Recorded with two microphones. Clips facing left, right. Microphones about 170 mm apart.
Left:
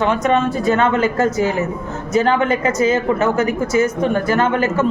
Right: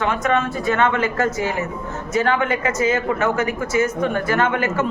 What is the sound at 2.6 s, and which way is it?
A man's voice, 35° left (ahead or behind).